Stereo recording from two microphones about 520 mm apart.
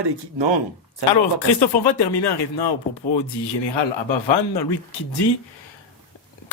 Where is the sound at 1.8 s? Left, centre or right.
Left.